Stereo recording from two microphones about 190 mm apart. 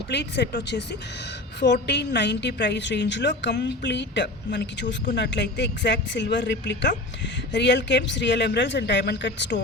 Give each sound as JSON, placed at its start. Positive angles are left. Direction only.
{"t": 0.1, "sound": "a woman's voice", "side_deg": 65}